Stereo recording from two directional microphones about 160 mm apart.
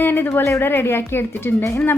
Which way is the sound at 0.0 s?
10° left (ahead or behind).